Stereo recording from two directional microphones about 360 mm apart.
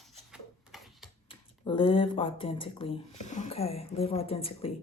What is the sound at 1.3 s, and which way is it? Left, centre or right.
Speech, centre.